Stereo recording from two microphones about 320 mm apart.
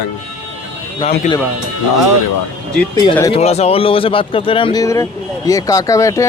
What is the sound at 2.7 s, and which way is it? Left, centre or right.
Speech, centre.